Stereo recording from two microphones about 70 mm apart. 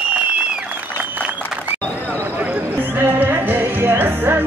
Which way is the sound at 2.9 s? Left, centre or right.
Right.